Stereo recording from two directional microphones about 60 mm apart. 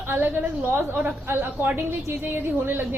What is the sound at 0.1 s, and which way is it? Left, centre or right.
A woman's voice, right.